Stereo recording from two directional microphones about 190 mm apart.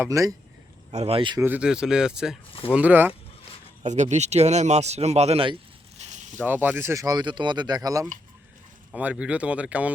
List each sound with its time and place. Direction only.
0.0 s speech: 15° right (ahead or behind)
0.9 s speech: 30° right (ahead or behind)
1.4 s speech: 10° right (ahead or behind)
3.8 s speech: 40° right (ahead or behind)
6.0 s a sound: 40° right (ahead or behind)
6.4 s speech: 10° right (ahead or behind)
8.9 s speech: 5° right (ahead or behind)